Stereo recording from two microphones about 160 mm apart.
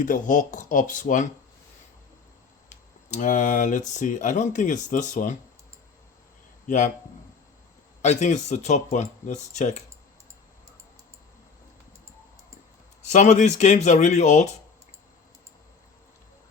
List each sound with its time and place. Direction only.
0.0 s speech: 55° left (ahead or behind)
3.1 s speech: 50° left (ahead or behind)
6.7 s speech: 50° left (ahead or behind)
8.0 s speech: 45° left (ahead or behind)
13.1 s speech: 45° left (ahead or behind)